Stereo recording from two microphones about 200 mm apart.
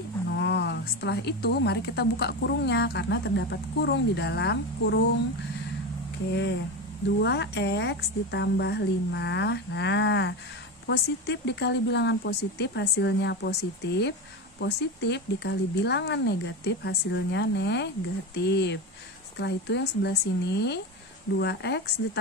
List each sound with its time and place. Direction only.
0.3 s a woman's voice: 60° left (ahead or behind)
7.2 s a woman's voice: 60° left (ahead or behind)